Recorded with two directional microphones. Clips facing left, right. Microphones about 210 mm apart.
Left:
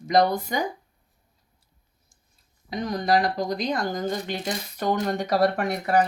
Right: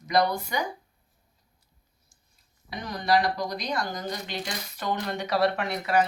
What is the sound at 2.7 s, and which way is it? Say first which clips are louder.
Speech: left 2 dB; 40° left (ahead or behind).